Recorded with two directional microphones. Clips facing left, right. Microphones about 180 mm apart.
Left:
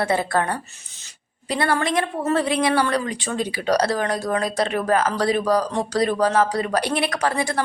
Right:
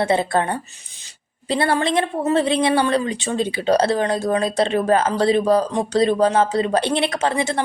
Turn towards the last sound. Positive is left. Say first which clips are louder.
# right 2 dB
turn(degrees=-25)  # may be behind; listen again after turning